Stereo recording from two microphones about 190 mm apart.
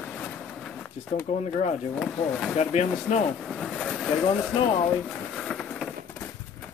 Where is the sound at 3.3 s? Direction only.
Centre (ahead or behind).